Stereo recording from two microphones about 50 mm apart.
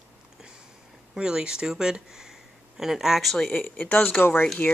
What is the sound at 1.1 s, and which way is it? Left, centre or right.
Speech, centre.